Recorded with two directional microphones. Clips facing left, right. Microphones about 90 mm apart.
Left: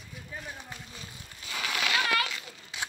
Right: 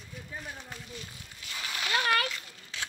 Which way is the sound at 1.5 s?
90° left.